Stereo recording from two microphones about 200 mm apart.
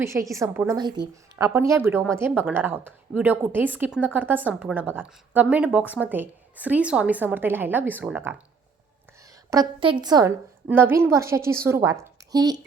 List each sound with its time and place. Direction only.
0.0 s a woman's voice: 15° right (ahead or behind)
0.8 s a woman's voice: 20° right (ahead or behind)
9.5 s a woman's voice: 20° right (ahead or behind)